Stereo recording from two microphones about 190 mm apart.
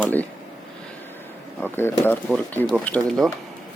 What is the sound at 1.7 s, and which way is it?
Speech, 10° left (ahead or behind).